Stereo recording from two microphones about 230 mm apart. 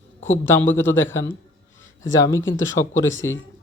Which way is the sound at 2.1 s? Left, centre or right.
Centre.